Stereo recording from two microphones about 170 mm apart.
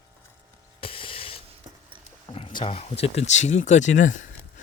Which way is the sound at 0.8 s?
30° left (ahead or behind).